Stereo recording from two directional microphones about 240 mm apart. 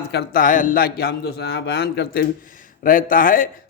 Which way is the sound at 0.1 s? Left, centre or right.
Left.